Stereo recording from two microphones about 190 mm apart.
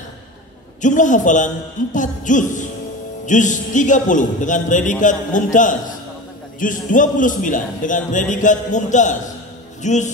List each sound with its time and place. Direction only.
0.8 s a man's voice: 40° left (ahead or behind)